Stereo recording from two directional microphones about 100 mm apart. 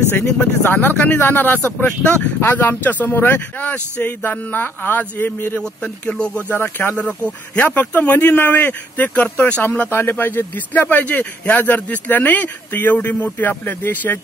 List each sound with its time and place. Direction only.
0.1 s speech: 20° left (ahead or behind)
6.5 s speech: 20° left (ahead or behind)